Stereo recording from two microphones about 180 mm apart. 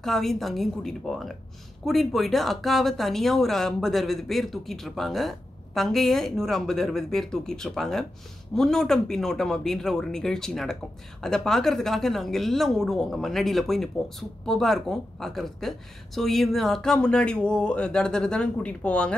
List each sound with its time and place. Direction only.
0.0 s speech: centre (ahead or behind)